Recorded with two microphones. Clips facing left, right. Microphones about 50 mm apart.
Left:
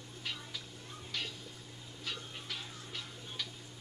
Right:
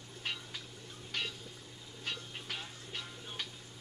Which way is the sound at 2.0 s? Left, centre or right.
Right.